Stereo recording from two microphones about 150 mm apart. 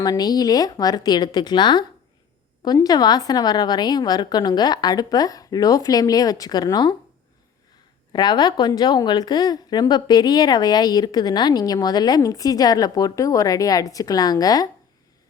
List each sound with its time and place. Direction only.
0.0 s a woman's voice: 25° left (ahead or behind)
8.1 s a woman's voice: 30° left (ahead or behind)